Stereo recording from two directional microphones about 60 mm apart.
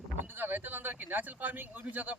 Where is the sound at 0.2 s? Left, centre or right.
Right.